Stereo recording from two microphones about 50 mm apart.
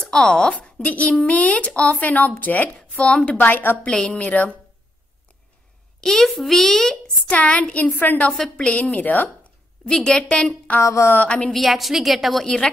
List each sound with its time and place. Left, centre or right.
0.0 s a woman's voice: centre; by 2.8 s left
3.0 s speech: left
3.3 s a woman's voice: left
3.8 s a child's voice: centre
4.2 s speech: left
5.9 s a child's voice: centre
7.2 s a woman's voice: left
8.3 s a child's voice: centre
8.9 s speech: left
9.8 s a child's voice: centre
10.8 s a sound: left
11.1 s speech: left
11.5 s a woman's voice: centre
12.4 s a child's voice: centre